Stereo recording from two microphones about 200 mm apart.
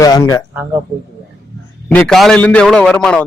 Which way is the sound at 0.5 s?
10° right (ahead or behind).